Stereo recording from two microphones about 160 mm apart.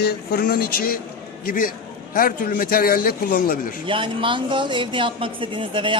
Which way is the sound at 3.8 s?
30° right (ahead or behind).